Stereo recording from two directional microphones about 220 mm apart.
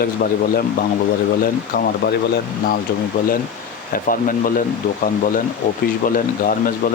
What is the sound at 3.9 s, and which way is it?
Speech, 40° left (ahead or behind).